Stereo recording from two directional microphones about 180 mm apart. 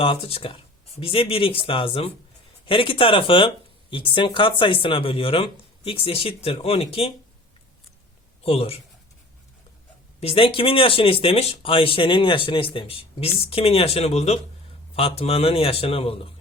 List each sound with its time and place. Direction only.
0.0 s speech: 30° left (ahead or behind)
8.4 s speech: 35° left (ahead or behind)
10.2 s speech: 30° left (ahead or behind)